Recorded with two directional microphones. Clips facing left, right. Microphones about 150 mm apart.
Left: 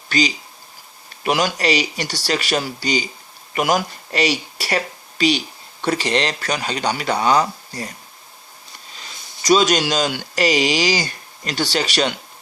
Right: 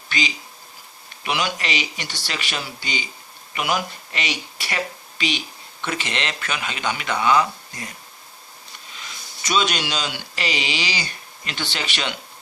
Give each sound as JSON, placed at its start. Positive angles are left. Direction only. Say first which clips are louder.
{"t": 0.1, "sound": "speech", "louder": "left 7 dB", "side_deg": 40}
{"t": 9.0, "sound": "speech", "louder": "even", "side_deg": 35}